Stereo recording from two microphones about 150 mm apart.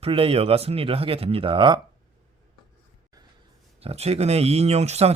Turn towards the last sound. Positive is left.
turn(degrees=-45)  # may be behind; listen again after turning